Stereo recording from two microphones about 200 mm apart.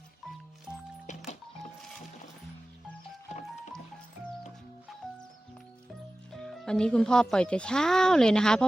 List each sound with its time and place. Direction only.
1.0 s music: 35° left (ahead or behind)
5.0 s music: 5° left (ahead or behind)
6.3 s speech: centre (ahead or behind)